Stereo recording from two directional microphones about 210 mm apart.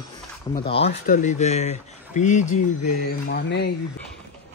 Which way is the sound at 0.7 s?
30° left (ahead or behind).